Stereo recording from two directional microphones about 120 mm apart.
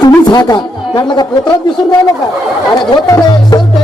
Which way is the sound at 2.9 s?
30° left (ahead or behind).